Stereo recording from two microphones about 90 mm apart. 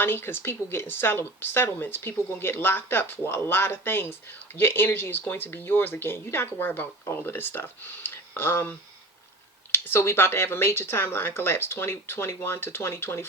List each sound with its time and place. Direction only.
0.0 s speech: 25° left (ahead or behind)
9.7 s speech: 25° left (ahead or behind)